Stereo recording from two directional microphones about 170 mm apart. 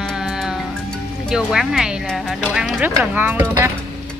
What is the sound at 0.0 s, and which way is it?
Music, 5° right (ahead or behind).